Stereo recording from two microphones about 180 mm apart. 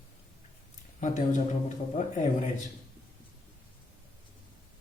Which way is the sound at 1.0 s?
40° left (ahead or behind).